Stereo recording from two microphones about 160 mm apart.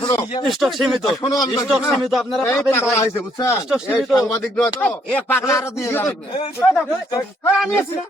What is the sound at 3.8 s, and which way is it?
Speech, 5° left (ahead or behind).